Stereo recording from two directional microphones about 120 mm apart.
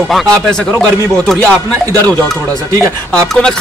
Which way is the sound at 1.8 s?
30° right (ahead or behind).